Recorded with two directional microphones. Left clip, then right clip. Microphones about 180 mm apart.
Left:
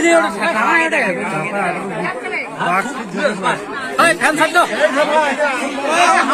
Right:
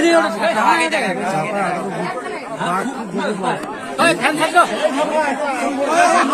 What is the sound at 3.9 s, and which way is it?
Speech, 20° left (ahead or behind).